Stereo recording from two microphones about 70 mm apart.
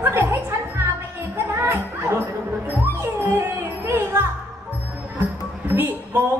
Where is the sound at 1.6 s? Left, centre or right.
Right.